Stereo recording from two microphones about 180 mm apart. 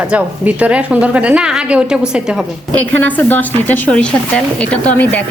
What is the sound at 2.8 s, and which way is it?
A woman's voice, 10° left (ahead or behind).